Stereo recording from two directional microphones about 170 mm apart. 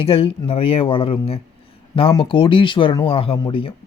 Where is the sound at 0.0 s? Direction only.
35° left (ahead or behind).